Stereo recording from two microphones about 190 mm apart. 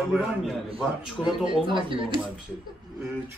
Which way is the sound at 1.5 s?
25° right (ahead or behind).